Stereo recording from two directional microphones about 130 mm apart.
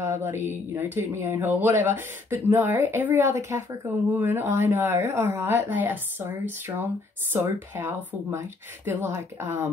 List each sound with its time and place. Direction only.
0.0 s speech: 15° right (ahead or behind)